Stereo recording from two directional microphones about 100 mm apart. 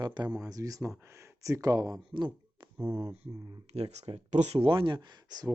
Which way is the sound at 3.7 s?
90° right.